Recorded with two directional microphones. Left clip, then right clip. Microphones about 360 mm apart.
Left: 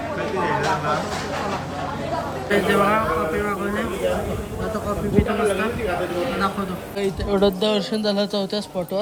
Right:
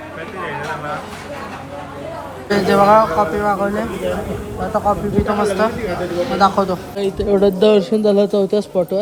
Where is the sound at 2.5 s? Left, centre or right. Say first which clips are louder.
Right 7 dB; centre.